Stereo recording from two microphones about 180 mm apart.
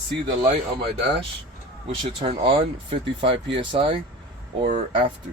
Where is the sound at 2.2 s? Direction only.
30° right (ahead or behind).